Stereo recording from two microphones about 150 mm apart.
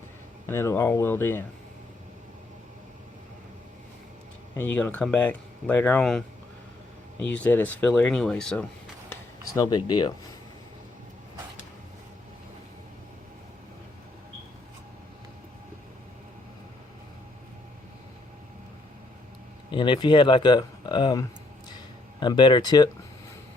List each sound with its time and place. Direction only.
0.4 s speech: 15° left (ahead or behind)
4.5 s speech: 10° left (ahead or behind)
9.6 s speech: 25° left (ahead or behind)
19.7 s speech: 35° left (ahead or behind)